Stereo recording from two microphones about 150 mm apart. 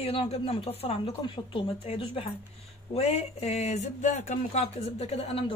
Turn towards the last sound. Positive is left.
turn(degrees=40)  # may be behind; listen again after turning